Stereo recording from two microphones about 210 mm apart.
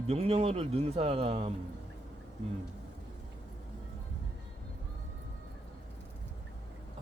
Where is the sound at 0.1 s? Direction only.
30° right (ahead or behind).